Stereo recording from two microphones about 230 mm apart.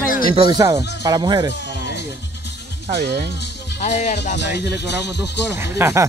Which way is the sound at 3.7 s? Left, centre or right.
Left.